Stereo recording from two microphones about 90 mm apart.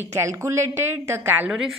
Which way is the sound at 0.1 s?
35° right (ahead or behind).